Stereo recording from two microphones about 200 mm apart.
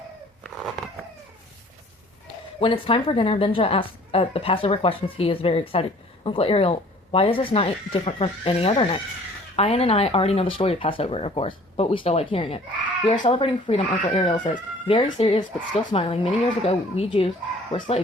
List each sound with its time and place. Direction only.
2.6 s a woman's voice: 25° left (ahead or behind)